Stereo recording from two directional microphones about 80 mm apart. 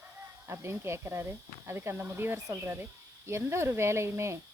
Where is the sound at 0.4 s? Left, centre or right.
Right.